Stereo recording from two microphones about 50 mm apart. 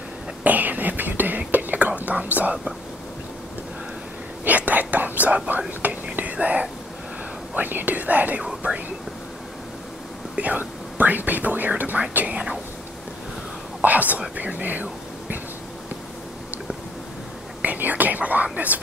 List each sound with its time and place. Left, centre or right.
0.4 s whispering: right
4.5 s speech: right
6.1 s whispering: right
7.5 s speech: right
10.3 s speech: right
13.8 s speech: right
17.6 s whispering: right